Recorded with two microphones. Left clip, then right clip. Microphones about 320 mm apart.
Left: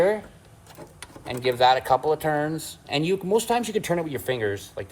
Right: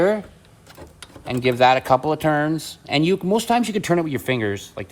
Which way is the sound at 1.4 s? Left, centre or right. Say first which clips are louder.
Right 3 dB; right.